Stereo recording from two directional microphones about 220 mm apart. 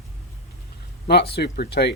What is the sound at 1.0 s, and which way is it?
Speech, 45° left (ahead or behind).